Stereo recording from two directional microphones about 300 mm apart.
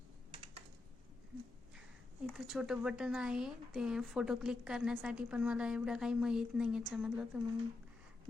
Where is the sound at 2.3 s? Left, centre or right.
Centre.